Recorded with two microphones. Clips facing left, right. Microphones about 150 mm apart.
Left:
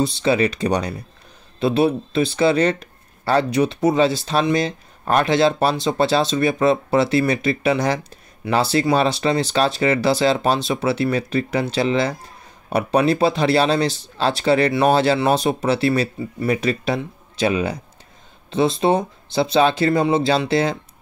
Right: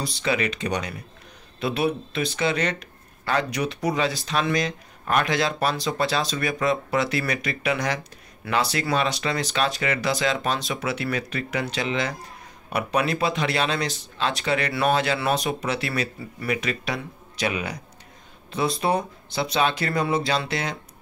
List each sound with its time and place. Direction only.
0.0 s speech: 30° left (ahead or behind)